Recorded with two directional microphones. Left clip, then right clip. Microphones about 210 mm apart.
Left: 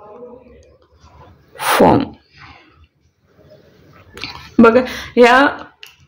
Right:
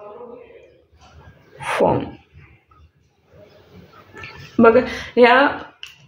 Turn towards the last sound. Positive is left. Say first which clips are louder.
# left 3 dB
turn(degrees=30)  # may be behind; listen again after turning